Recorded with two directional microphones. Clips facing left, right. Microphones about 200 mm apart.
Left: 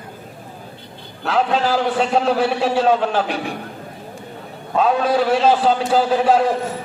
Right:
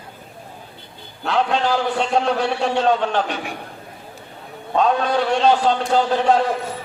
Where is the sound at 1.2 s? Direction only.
5° left (ahead or behind).